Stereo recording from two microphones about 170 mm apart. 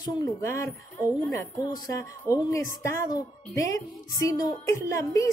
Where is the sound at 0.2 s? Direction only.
15° left (ahead or behind).